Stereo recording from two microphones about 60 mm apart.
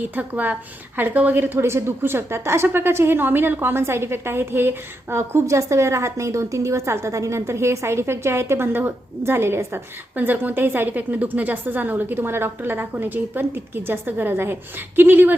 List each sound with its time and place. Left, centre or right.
0.0 s a woman's voice: right
5.1 s a woman's voice: right